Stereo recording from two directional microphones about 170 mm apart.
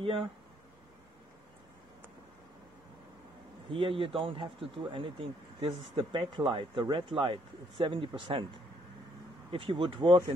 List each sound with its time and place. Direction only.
0.0 s speech: 30° right (ahead or behind)
3.7 s speech: 30° right (ahead or behind)
9.5 s speech: 30° right (ahead or behind)